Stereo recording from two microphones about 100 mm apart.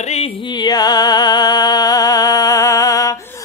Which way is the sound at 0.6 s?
40° left (ahead or behind).